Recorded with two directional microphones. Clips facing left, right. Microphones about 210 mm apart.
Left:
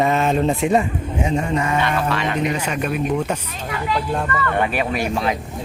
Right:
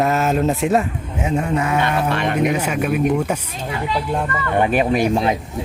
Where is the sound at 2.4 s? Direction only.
10° right (ahead or behind).